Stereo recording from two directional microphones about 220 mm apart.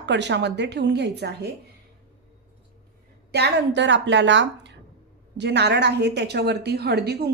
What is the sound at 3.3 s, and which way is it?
A woman's voice, 50° right (ahead or behind).